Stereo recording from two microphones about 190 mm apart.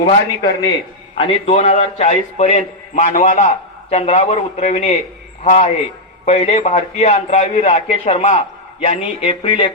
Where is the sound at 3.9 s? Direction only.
30° left (ahead or behind).